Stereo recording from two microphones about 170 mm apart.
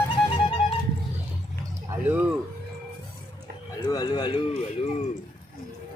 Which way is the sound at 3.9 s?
25° left (ahead or behind).